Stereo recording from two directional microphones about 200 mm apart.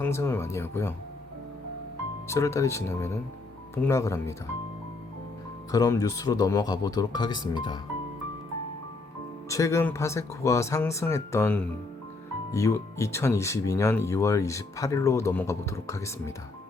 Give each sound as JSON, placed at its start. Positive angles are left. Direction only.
{"t": 0.0, "sound": "speech", "side_deg": 10}
{"t": 2.2, "sound": "speech", "side_deg": 15}
{"t": 5.7, "sound": "speech", "side_deg": 20}
{"t": 9.5, "sound": "speech", "side_deg": 15}